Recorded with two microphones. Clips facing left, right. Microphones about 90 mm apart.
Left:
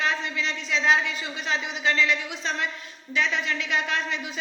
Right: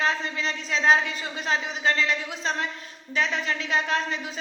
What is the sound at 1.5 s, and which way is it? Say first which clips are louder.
A man's voice: right 1 dB; 40° right (ahead or behind).